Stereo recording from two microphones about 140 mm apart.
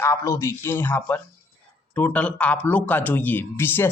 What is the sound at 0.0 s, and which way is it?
Speech, 20° left (ahead or behind).